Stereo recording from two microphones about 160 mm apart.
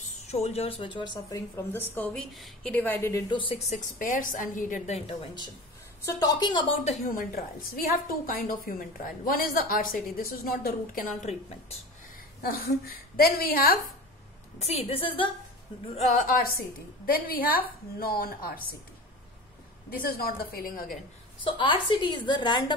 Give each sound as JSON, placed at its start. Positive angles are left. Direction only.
{"t": 0.3, "sound": "speech", "side_deg": 40}
{"t": 1.6, "sound": "a woman's voice", "side_deg": 15}
{"t": 2.0, "sound": "a woman's voice", "side_deg": 5}
{"t": 3.3, "sound": "speech", "side_deg": 30}
{"t": 3.7, "sound": "a woman's voice", "side_deg": 55}
{"t": 6.8, "sound": "a woman's voice", "side_deg": 45}
{"t": 8.3, "sound": "a woman's voice", "side_deg": 60}
{"t": 11.3, "sound": "a woman's voice", "side_deg": 45}
{"t": 12.4, "sound": "a woman's voice", "side_deg": 65}
{"t": 14.6, "sound": "speech", "side_deg": 40}
{"t": 16.2, "sound": "a woman's voice", "side_deg": 60}
{"t": 19.9, "sound": "a woman's voice", "side_deg": 65}
{"t": 21.5, "sound": "a woman's voice", "side_deg": 30}